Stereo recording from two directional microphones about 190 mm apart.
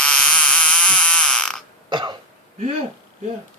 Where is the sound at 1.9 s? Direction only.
25° right (ahead or behind).